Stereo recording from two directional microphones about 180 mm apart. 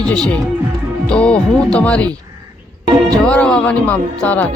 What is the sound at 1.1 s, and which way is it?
Music, 5° left (ahead or behind).